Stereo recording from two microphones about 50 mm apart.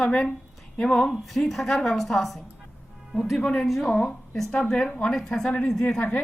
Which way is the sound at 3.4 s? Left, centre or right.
Centre.